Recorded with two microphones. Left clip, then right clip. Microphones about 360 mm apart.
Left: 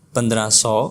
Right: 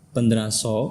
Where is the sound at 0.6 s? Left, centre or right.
Left.